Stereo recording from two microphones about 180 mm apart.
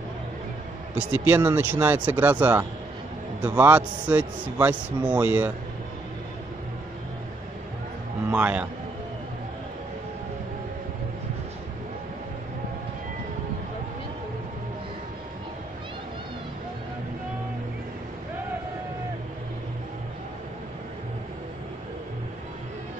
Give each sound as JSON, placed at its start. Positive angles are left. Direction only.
{"t": 0.9, "sound": "speech", "side_deg": -10}
{"t": 8.3, "sound": "speech", "side_deg": -10}